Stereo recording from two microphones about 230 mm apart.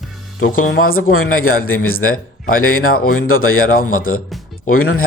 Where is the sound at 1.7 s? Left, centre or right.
Left.